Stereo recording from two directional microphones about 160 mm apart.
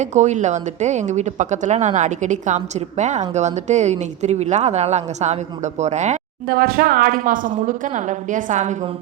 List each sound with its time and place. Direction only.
0.0 s speech: 50° right (ahead or behind)
6.5 s speech: 65° right (ahead or behind); by 8.7 s 50° right (ahead or behind)